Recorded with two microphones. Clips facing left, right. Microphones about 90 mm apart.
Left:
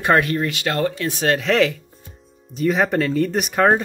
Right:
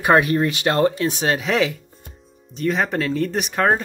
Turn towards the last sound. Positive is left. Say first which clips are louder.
# left 2 dB
turn(degrees=0)  # may be behind; listen again after turning